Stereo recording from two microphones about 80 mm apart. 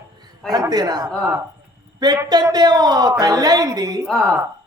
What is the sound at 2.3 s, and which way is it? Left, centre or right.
A man's voice, right.